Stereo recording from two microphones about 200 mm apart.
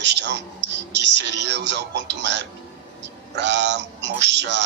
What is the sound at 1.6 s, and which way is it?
Speech, 60° right (ahead or behind).